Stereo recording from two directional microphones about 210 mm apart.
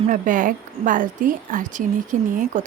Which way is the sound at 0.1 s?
40° right (ahead or behind).